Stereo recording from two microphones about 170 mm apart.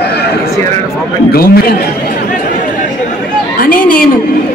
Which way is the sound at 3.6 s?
55° left (ahead or behind).